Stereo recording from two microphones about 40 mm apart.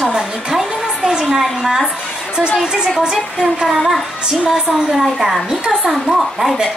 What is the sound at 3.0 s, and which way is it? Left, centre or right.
Speech, centre.